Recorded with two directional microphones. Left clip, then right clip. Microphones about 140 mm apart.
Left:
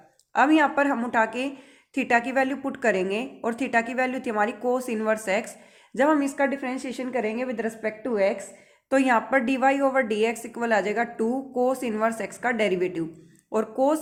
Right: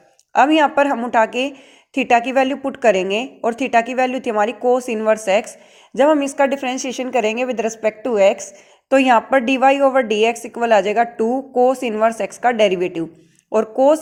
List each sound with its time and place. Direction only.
0.3 s a woman's voice: 40° right (ahead or behind)